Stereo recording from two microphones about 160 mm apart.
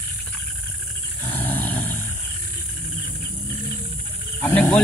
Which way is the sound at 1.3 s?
10° left (ahead or behind).